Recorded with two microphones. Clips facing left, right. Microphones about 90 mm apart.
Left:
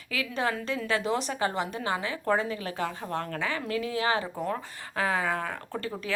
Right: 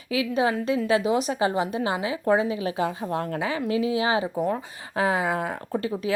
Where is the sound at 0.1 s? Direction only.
15° right (ahead or behind).